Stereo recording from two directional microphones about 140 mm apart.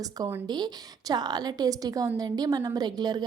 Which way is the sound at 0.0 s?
25° right (ahead or behind).